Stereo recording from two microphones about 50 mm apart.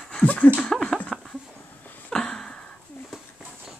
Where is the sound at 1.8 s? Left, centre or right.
Left.